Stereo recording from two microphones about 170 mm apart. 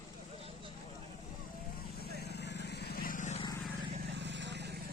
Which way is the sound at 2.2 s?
85° left.